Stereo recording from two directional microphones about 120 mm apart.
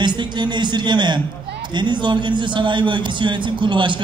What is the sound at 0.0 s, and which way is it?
A man's voice, 40° right (ahead or behind).